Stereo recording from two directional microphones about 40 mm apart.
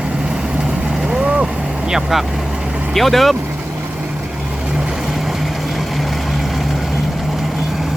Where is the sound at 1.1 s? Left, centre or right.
Right.